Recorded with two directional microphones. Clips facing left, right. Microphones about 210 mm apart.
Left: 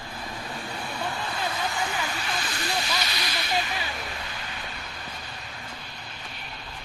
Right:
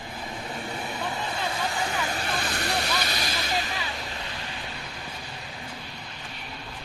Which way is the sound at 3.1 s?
45° right (ahead or behind).